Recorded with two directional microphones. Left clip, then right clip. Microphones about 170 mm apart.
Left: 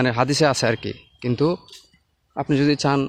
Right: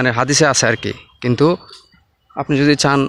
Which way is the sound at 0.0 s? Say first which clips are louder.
Right 5 dB; 10° left (ahead or behind).